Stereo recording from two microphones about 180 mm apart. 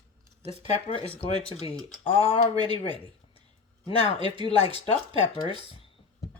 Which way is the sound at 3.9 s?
30° left (ahead or behind).